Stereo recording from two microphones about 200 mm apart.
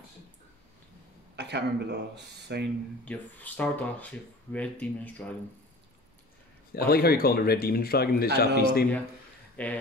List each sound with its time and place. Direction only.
1.3 s speech: 55° right (ahead or behind)
3.1 s speech: 10° left (ahead or behind)
6.7 s speech: 50° left (ahead or behind)
9.6 s speech: 5° left (ahead or behind)